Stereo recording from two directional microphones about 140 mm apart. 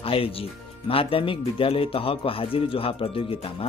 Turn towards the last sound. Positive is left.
turn(degrees=45)  # may be behind; listen again after turning